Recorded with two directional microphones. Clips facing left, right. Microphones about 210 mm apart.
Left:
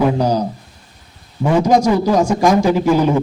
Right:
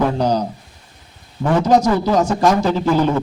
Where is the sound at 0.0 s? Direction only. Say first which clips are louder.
Left 2 dB; 10° left (ahead or behind).